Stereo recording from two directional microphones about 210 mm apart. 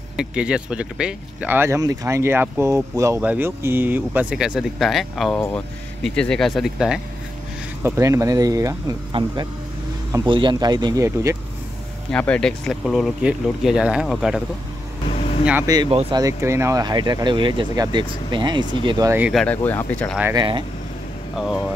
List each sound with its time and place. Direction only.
0.2 s speech: 5° right (ahead or behind)
7.8 s speech: 10° right (ahead or behind)
12.1 s speech: 5° left (ahead or behind)
15.4 s speech: 10° right (ahead or behind)
16.2 s speech: 15° right (ahead or behind)
19.4 s speech: 10° left (ahead or behind)
20.3 s speech: 25° right (ahead or behind)